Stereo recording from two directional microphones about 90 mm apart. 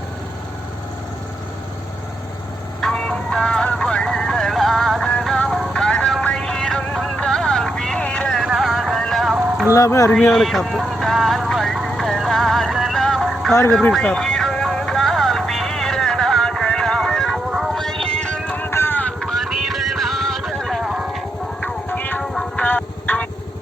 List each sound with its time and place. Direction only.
2.8 s music: 10° left (ahead or behind)
9.7 s speech: 35° left (ahead or behind)
10.1 s vehicle: 5° left (ahead or behind)
13.9 s music: 10° left (ahead or behind)
18.6 s vehicle: 25° left (ahead or behind)
19.2 s music: centre (ahead or behind)
20.6 s a sound: centre (ahead or behind)
20.8 s music: 10° right (ahead or behind)
21.6 s music: 15° left (ahead or behind)
22.2 s music: 5° left (ahead or behind)
22.6 s a sound: 20° left (ahead or behind)